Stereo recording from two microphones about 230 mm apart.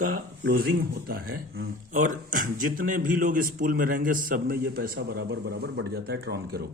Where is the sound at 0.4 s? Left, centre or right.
Right.